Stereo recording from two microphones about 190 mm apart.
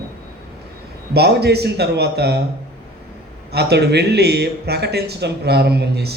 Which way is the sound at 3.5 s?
60° right (ahead or behind).